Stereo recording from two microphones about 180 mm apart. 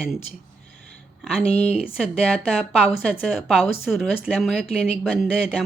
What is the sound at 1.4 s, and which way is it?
Speech, 35° left (ahead or behind).